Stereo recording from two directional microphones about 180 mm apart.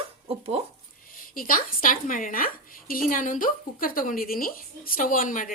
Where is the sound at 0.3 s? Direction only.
35° right (ahead or behind).